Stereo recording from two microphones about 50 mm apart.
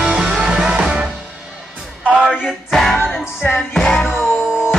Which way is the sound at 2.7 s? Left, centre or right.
Centre.